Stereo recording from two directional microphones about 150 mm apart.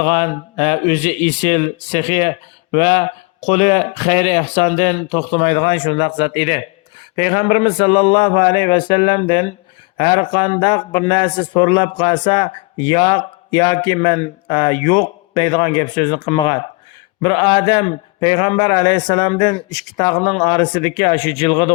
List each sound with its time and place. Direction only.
0.0 s speech: 45° left (ahead or behind)
4.6 s speech: 45° left (ahead or behind)